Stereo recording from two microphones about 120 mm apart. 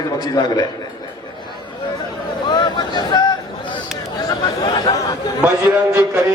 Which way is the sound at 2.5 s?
40° left (ahead or behind).